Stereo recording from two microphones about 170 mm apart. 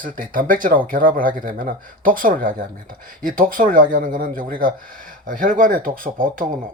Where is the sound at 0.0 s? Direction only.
55° right (ahead or behind).